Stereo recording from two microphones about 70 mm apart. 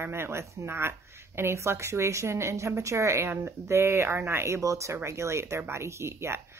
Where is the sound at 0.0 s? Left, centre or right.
Right.